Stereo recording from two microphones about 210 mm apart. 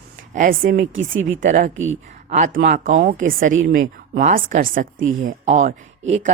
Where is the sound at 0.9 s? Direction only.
65° right (ahead or behind).